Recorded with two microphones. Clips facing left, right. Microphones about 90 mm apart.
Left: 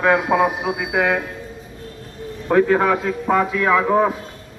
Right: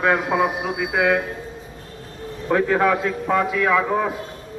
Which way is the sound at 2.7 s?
25° left (ahead or behind).